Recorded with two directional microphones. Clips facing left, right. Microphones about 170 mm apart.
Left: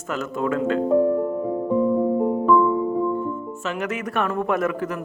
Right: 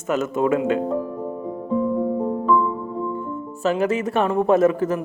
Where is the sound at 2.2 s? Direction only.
10° left (ahead or behind).